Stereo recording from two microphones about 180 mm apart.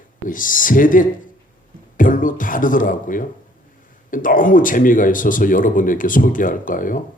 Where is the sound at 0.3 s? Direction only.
50° left (ahead or behind).